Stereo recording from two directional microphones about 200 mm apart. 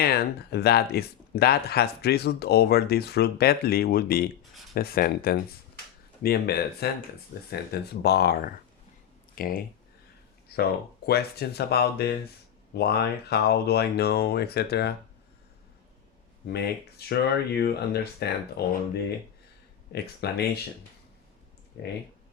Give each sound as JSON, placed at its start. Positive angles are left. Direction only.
{"t": 0.0, "sound": "speech", "side_deg": 50}
{"t": 17.1, "sound": "speech", "side_deg": 55}
{"t": 19.9, "sound": "speech", "side_deg": 55}
{"t": 21.7, "sound": "speech", "side_deg": 55}